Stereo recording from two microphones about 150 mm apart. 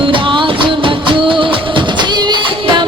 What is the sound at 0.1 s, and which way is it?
Music, 35° right (ahead or behind).